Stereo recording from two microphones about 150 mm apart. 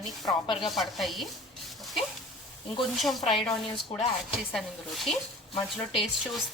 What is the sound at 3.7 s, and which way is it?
Speech, 40° left (ahead or behind).